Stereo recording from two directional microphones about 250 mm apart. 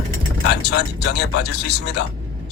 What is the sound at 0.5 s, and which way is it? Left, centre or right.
A man's voice, left.